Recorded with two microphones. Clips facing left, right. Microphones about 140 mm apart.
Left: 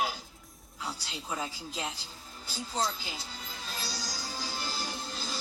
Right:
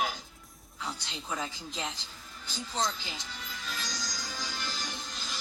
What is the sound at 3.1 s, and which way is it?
Music, 35° left (ahead or behind).